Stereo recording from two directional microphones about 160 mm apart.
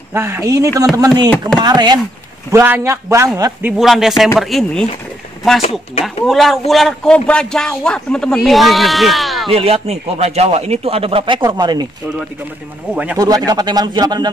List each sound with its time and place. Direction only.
0.1 s speech: 15° right (ahead or behind)
2.5 s a man's voice: 15° right (ahead or behind)
3.6 s a man's voice: 5° right (ahead or behind)
6.0 s a man's voice: centre (ahead or behind)
9.5 s speech: 35° right (ahead or behind)
12.9 s a man's voice: 10° right (ahead or behind)
13.2 s speech: 25° right (ahead or behind)